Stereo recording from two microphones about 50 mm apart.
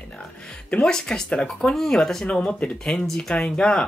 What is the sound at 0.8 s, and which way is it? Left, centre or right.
Speech, centre.